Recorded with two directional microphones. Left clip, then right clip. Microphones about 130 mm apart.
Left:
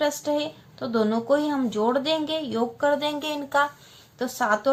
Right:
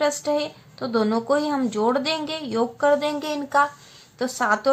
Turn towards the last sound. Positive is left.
turn(degrees=-40)  # may be behind; listen again after turning